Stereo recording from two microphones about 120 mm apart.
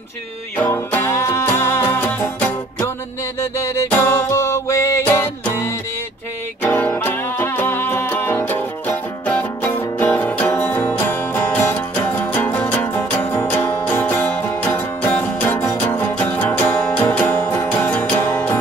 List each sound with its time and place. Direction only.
0.6 s music: 20° left (ahead or behind)
3.5 s music: 25° left (ahead or behind)